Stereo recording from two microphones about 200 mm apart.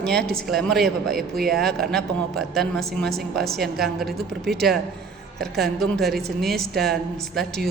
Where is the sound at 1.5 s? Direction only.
Centre (ahead or behind).